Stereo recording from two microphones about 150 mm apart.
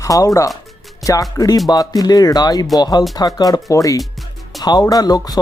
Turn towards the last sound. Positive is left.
turn(degrees=25)  # may be behind; listen again after turning